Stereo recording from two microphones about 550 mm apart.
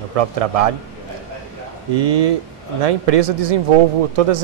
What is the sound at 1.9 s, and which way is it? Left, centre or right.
Speech, right.